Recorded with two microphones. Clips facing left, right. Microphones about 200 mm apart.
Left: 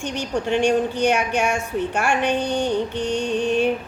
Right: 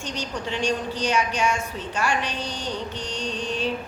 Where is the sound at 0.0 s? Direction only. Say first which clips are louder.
Left 6 dB; 60° left (ahead or behind).